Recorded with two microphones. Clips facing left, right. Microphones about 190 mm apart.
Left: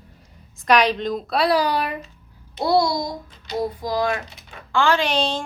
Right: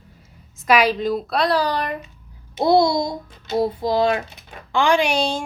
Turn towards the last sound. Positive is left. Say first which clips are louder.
# right 2 dB
turn(degrees=-10)  # may be behind; listen again after turning